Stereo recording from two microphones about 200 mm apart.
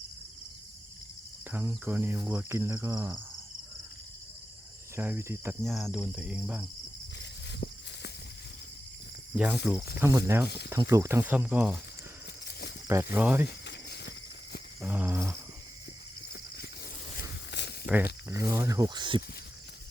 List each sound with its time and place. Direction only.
1.5 s cricket: 10° right (ahead or behind)
4.9 s cricket: 10° right (ahead or behind)
5.6 s cricket: centre (ahead or behind)
7.2 s walk: 60° left (ahead or behind)
9.3 s speech: 10° right (ahead or behind)
10.0 s cricket: 15° right (ahead or behind)
12.5 s a sound: 55° left (ahead or behind)
12.9 s cricket: 15° right (ahead or behind)
13.7 s a sound: 55° left (ahead or behind)
14.8 s insect: 10° right (ahead or behind)
17.5 s a sound: 60° left (ahead or behind)
18.3 s cricket: 15° right (ahead or behind)